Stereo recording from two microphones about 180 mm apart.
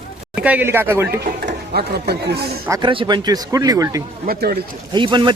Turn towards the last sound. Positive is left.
turn(degrees=-25)  # may be behind; listen again after turning